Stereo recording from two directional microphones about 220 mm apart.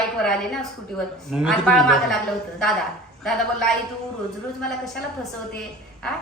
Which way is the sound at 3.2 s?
Centre (ahead or behind).